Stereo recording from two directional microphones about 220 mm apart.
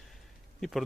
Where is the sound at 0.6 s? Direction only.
Centre (ahead or behind).